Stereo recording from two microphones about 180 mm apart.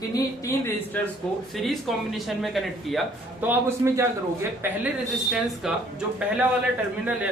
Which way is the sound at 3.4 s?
10° right (ahead or behind).